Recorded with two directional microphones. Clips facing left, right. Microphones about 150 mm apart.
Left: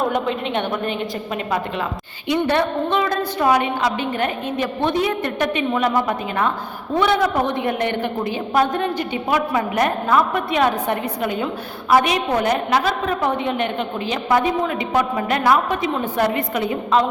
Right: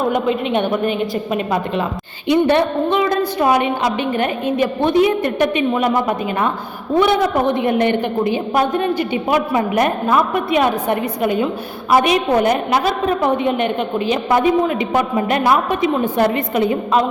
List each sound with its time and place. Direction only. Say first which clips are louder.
0.1 s a woman's voice: right 4 dB; 10° right (ahead or behind)